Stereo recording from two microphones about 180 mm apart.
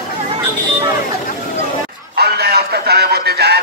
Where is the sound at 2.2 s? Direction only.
65° right (ahead or behind).